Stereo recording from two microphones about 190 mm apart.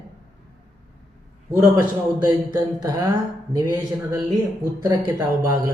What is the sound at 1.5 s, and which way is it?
A man's voice, 20° right (ahead or behind).